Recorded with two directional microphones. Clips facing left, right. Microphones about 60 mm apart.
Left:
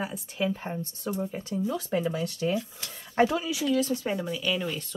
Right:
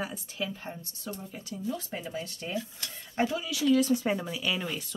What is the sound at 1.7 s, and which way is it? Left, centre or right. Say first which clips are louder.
Speech: left 5 dB; left.